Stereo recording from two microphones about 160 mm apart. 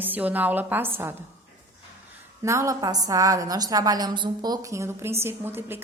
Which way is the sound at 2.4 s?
20° right (ahead or behind).